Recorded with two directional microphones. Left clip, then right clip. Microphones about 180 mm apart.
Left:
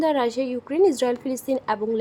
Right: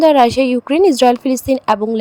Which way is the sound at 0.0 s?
40° right (ahead or behind).